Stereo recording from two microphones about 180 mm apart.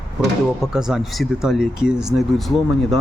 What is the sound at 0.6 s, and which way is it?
Speech, 5° right (ahead or behind).